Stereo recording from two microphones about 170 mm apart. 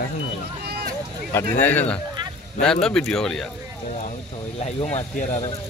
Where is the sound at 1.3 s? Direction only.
10° left (ahead or behind).